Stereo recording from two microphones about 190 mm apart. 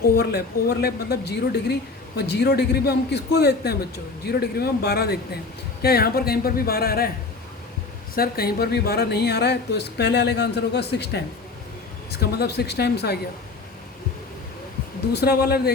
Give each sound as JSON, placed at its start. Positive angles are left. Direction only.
{"t": 0.2, "sound": "speech", "side_deg": 55}
{"t": 8.1, "sound": "speech", "side_deg": 50}
{"t": 15.1, "sound": "speech", "side_deg": 55}